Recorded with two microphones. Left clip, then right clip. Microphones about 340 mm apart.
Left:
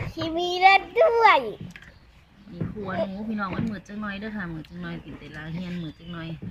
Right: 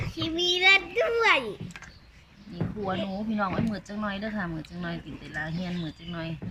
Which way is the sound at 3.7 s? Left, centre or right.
Centre.